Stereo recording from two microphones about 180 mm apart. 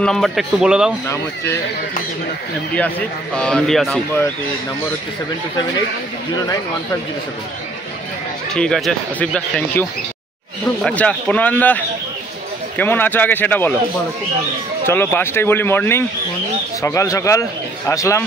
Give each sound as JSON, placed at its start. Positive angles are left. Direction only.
{"t": 0.0, "sound": "speech", "side_deg": 0}
{"t": 1.0, "sound": "a man's voice", "side_deg": 15}
{"t": 3.3, "sound": "speech", "side_deg": 5}
{"t": 6.3, "sound": "speech", "side_deg": 20}
{"t": 8.5, "sound": "a man's voice", "side_deg": 0}
{"t": 14.9, "sound": "a man's voice", "side_deg": 15}